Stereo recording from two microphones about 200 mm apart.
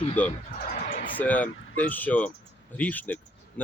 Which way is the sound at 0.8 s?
35° left (ahead or behind).